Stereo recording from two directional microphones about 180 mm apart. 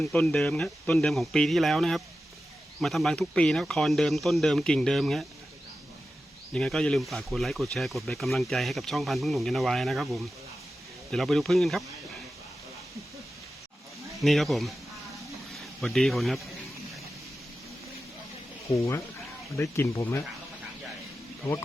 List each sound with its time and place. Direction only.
0.0 s speech: 10° left (ahead or behind)
6.5 s speech: 5° left (ahead or behind)
14.2 s speech: centre (ahead or behind)
18.7 s speech: 15° left (ahead or behind)